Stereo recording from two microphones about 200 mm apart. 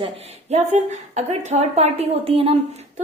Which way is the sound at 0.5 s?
35° right (ahead or behind).